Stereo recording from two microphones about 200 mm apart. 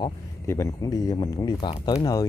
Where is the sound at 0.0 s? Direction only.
15° left (ahead or behind).